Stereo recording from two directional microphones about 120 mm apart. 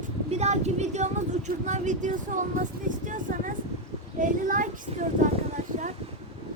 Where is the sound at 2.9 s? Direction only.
90° right.